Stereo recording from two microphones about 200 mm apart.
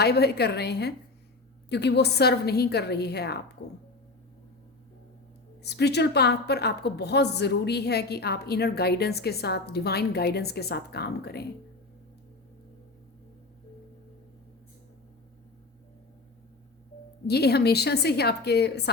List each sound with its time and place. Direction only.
0.0 s a woman's voice: 55° left (ahead or behind)
5.6 s a woman's voice: 55° left (ahead or behind)
17.2 s a woman's voice: 55° left (ahead or behind)